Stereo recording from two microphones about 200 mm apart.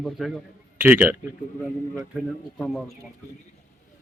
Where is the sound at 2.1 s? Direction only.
Centre (ahead or behind).